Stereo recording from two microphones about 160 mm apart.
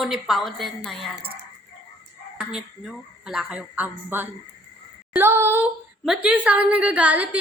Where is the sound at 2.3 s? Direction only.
5° right (ahead or behind).